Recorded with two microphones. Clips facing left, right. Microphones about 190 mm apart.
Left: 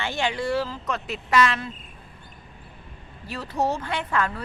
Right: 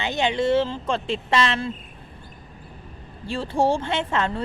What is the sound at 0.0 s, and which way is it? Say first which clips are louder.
Speech: right 4 dB; 20° right (ahead or behind).